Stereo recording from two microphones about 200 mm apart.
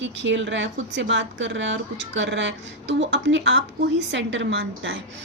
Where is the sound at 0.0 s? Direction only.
65° right (ahead or behind).